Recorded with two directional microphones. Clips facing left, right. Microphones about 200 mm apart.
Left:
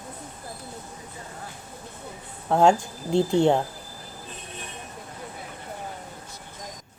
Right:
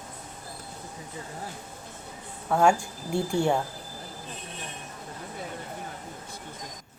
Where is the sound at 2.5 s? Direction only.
20° left (ahead or behind).